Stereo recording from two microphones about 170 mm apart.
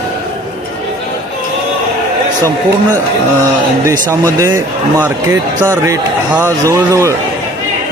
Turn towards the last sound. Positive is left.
turn(degrees=-15)  # may be behind; listen again after turning